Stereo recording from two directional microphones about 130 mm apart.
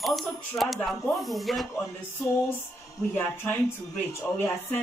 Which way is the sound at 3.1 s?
15° left (ahead or behind).